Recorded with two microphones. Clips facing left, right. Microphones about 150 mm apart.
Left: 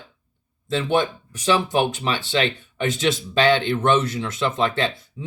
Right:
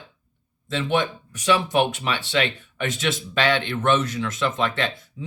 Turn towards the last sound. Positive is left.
turn(degrees=35)  # may be behind; listen again after turning